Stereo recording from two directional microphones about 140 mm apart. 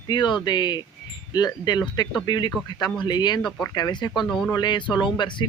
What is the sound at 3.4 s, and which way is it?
Speech, centre (ahead or behind).